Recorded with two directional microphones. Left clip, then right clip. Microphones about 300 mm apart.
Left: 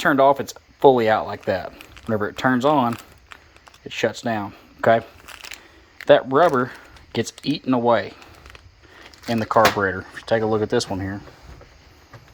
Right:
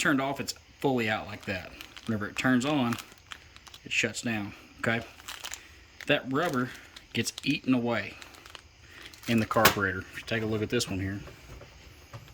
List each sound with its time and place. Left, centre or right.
0.0 s speech: centre
1.8 s a sound: centre
3.8 s speech: centre
6.3 s speech: centre
9.2 s speech: centre